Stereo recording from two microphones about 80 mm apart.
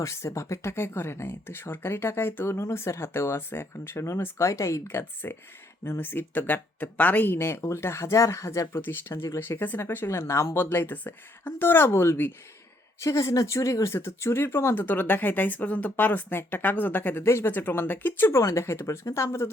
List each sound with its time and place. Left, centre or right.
0.0 s speech: left
18.3 s speech: left